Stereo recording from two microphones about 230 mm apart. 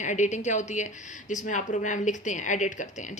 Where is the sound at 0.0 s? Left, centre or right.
Left.